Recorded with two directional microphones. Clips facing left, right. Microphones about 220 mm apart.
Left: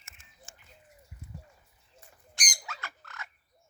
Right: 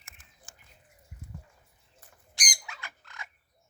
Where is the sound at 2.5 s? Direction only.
15° right (ahead or behind).